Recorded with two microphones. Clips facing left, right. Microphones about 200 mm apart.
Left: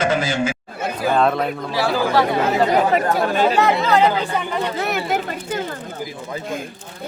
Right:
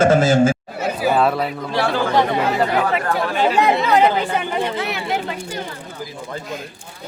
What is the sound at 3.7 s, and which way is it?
Speech, 15° right (ahead or behind).